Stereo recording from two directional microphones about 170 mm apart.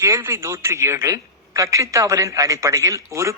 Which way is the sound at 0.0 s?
15° right (ahead or behind).